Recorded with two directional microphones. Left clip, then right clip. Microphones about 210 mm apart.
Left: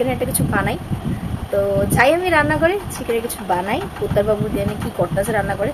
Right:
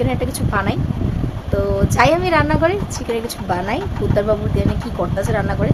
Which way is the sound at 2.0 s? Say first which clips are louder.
Right 1 dB; 15° right (ahead or behind).